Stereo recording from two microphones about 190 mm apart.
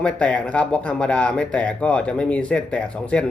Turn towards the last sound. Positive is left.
turn(degrees=5)  # may be behind; listen again after turning